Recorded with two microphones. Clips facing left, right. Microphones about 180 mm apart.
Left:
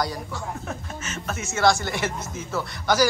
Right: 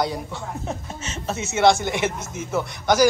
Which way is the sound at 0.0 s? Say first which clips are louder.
Right 3 dB; 25° right (ahead or behind).